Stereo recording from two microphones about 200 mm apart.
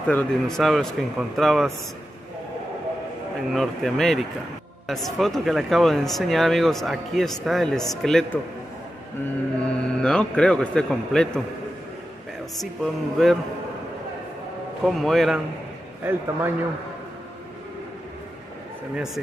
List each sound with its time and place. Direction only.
0.1 s speech: 5° left (ahead or behind)
3.5 s speech: centre (ahead or behind)
9.6 s speech: 5° left (ahead or behind)
12.5 s speech: centre (ahead or behind)
14.8 s speech: centre (ahead or behind)
16.0 s a man's voice: 10° right (ahead or behind)